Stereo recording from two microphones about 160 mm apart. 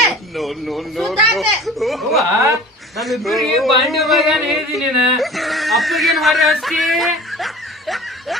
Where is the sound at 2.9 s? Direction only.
Centre (ahead or behind).